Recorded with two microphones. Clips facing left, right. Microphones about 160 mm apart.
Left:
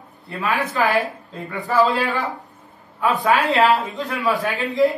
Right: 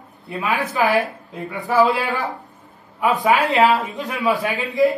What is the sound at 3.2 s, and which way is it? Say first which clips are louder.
A man's voice: right 1 dB; 15° right (ahead or behind).